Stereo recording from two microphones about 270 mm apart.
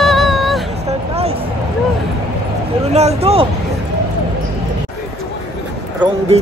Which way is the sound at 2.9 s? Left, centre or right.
Right.